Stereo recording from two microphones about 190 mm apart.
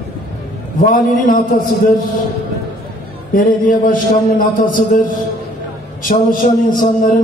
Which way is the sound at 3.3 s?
45° left (ahead or behind).